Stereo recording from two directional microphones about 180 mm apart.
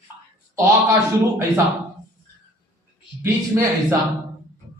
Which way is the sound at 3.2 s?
15° right (ahead or behind).